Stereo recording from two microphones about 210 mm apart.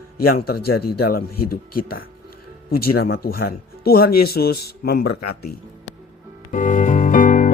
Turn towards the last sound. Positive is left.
turn(degrees=40)  # may be behind; listen again after turning